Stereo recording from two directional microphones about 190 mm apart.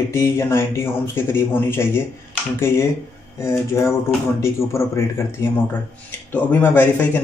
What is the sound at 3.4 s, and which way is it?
Mantra, 15° left (ahead or behind).